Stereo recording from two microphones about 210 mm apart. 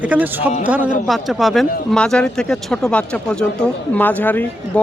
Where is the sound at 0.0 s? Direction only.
10° right (ahead or behind).